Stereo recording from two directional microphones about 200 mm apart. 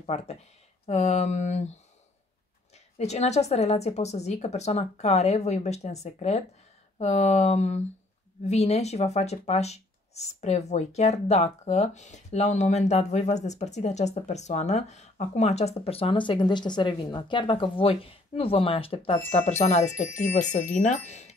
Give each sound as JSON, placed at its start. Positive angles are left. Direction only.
{"t": 0.0, "sound": "speech", "side_deg": 30}
{"t": 3.0, "sound": "speech", "side_deg": 35}